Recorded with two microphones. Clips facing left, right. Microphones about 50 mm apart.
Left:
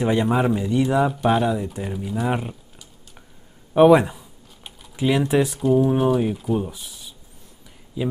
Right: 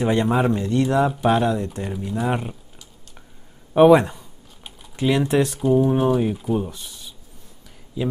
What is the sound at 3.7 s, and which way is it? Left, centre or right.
Typing, centre.